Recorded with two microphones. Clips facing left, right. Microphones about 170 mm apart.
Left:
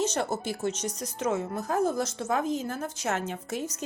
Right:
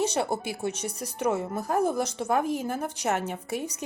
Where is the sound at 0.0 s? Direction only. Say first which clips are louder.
Right 2 dB; 10° right (ahead or behind).